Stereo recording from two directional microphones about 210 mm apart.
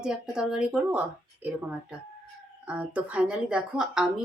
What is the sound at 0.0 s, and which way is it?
Speech, 5° right (ahead or behind).